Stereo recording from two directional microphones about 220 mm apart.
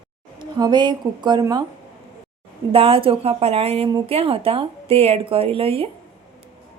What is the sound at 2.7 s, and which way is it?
Speech, 25° right (ahead or behind).